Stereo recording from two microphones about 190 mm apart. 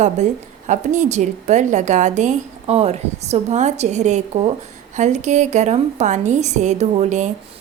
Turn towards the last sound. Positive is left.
turn(degrees=-40)  # may be behind; listen again after turning